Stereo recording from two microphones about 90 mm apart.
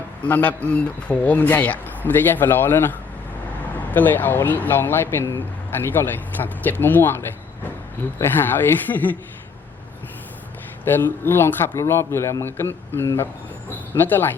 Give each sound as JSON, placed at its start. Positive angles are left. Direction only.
{"t": 0.3, "sound": "speech", "side_deg": 20}
{"t": 10.8, "sound": "speech", "side_deg": 25}